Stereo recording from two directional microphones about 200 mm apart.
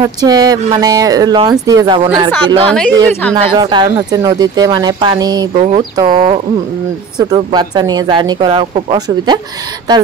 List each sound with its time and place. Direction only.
0.0 s speech: 20° right (ahead or behind)
3.1 s a woman's voice: 10° left (ahead or behind)
3.5 s speech: 20° right (ahead or behind)
5.5 s speech: 35° right (ahead or behind)
5.8 s speech: 20° right (ahead or behind)